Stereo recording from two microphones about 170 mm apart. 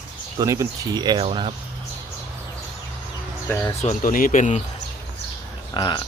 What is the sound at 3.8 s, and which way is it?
Speech, 45° left (ahead or behind).